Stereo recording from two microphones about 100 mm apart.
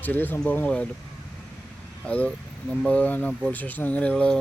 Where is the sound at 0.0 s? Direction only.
20° left (ahead or behind).